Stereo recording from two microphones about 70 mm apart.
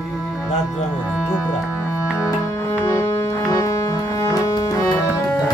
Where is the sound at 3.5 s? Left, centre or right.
Left.